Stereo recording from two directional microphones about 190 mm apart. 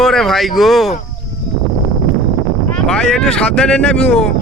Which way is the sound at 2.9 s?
5° left (ahead or behind).